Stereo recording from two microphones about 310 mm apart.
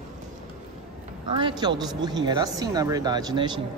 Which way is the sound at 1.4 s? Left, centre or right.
Centre.